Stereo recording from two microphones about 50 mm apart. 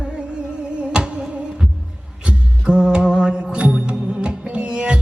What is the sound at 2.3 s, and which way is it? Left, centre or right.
Music, centre.